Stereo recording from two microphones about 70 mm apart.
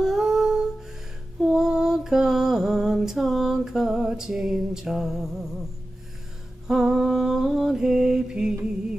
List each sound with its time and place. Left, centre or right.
0.0 s music: centre
1.4 s a sound: centre
6.7 s mantra: centre